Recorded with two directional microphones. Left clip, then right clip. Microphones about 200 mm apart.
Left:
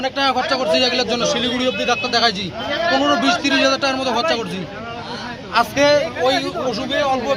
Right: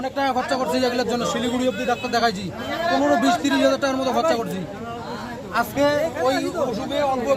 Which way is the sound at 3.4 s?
15° right (ahead or behind).